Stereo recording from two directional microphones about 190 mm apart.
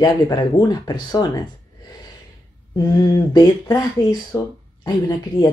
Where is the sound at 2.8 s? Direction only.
20° left (ahead or behind).